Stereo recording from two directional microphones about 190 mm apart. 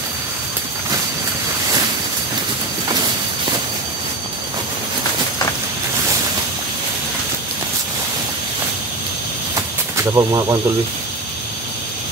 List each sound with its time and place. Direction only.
9.9 s speech: 15° right (ahead or behind)